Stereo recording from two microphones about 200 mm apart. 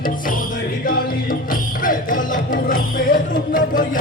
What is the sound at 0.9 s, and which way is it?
Music, 45° left (ahead or behind).